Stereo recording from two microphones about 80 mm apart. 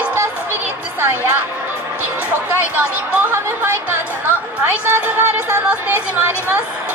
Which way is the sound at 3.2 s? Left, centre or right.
Right.